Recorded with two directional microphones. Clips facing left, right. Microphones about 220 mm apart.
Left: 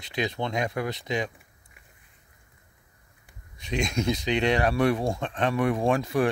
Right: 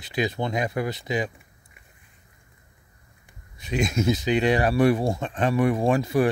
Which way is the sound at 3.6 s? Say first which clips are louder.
Right 3 dB; 5° right (ahead or behind).